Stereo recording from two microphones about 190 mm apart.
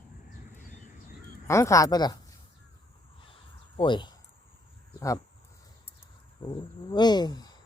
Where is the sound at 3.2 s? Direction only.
25° left (ahead or behind).